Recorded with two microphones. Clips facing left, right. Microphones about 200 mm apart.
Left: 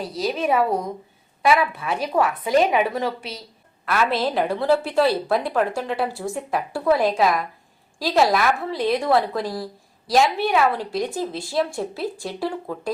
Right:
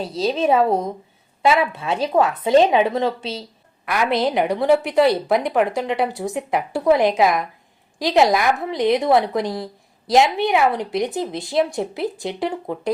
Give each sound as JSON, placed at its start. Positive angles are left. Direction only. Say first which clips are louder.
{"t": 0.0, "sound": "a woman's voice", "louder": "right 4 dB", "side_deg": -25}
{"t": 3.8, "sound": "a woman's voice", "louder": "right 2 dB", "side_deg": -15}